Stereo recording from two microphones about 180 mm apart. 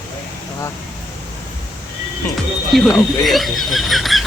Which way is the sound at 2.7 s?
Centre (ahead or behind).